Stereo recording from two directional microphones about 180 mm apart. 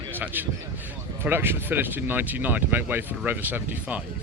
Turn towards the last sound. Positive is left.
turn(degrees=-10)  # may be behind; listen again after turning